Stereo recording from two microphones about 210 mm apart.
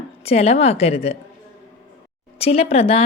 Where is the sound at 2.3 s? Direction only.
30° left (ahead or behind).